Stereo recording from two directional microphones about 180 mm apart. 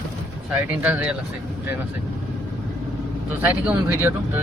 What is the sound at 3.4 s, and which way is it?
Speech, 10° right (ahead or behind).